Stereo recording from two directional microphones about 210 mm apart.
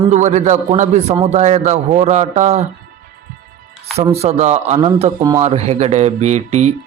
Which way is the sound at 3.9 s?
30° right (ahead or behind).